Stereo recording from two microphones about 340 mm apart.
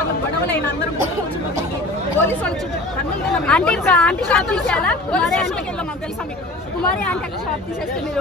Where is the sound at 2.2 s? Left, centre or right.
Centre.